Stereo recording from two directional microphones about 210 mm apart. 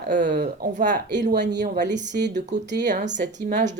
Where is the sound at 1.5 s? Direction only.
50° right (ahead or behind).